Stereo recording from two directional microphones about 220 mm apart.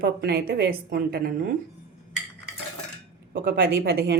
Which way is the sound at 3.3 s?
40° right (ahead or behind).